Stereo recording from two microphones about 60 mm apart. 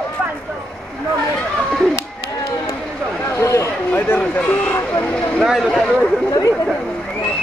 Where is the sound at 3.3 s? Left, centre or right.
Left.